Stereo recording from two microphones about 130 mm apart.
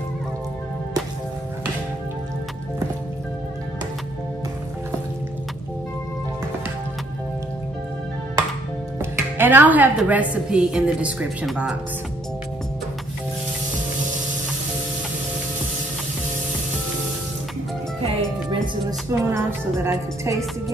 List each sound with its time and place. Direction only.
9.1 s a woman's voice: 15° right (ahead or behind)
18.5 s a woman's voice: 25° right (ahead or behind)